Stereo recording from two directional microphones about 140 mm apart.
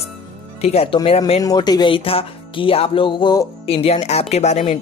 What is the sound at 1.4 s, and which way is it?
Speech, 30° left (ahead or behind).